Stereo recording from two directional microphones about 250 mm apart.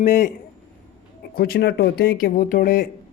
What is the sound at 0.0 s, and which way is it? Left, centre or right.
Speech, left.